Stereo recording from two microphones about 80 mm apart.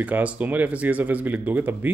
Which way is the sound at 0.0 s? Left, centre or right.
Centre.